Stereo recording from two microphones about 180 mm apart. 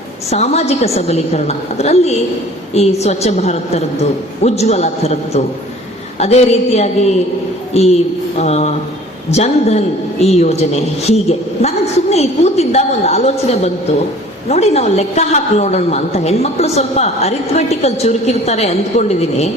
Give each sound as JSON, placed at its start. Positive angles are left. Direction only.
{"t": 0.3, "sound": "a woman's voice", "side_deg": 35}